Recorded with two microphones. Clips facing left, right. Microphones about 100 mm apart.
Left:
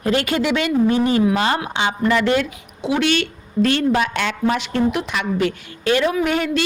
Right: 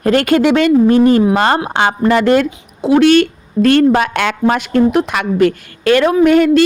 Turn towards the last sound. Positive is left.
turn(degrees=-50)  # may be behind; listen again after turning